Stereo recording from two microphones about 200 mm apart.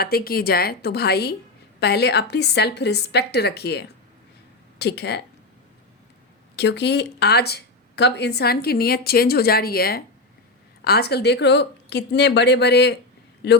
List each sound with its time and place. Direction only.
0.0 s speech: 50° left (ahead or behind)
6.6 s speech: 60° left (ahead or behind)